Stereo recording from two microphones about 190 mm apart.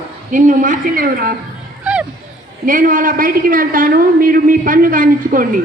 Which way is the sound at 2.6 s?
45° right (ahead or behind).